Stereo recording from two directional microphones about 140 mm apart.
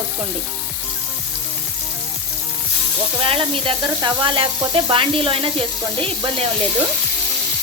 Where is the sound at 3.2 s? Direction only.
40° right (ahead or behind).